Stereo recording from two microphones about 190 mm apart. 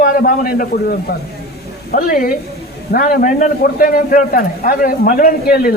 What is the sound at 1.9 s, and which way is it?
A man's voice, 45° left (ahead or behind).